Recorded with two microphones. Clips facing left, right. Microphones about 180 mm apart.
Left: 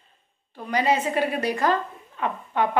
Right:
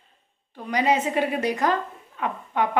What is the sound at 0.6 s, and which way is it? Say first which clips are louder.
A woman's voice: even; 15° right (ahead or behind).